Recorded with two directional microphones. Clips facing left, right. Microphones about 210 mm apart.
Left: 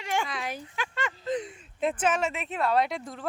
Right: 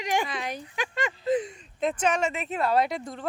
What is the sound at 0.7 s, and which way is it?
Speech, 15° right (ahead or behind).